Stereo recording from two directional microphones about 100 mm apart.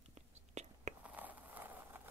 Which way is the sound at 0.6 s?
90° right.